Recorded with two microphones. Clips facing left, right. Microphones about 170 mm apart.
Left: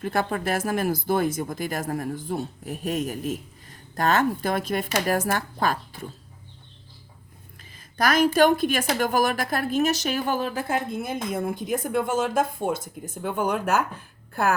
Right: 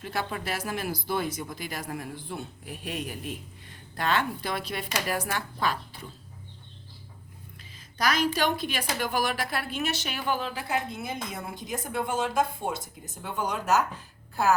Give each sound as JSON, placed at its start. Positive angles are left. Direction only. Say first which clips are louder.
{"t": 0.0, "sound": "speech", "louder": "left 7 dB", "side_deg": 50}
{"t": 7.9, "sound": "speech", "louder": "left 7 dB", "side_deg": 50}